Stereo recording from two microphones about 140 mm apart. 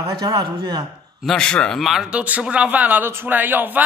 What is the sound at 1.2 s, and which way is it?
A man's voice, 5° left (ahead or behind).